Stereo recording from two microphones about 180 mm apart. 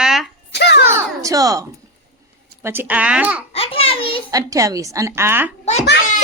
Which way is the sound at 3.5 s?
30° left (ahead or behind).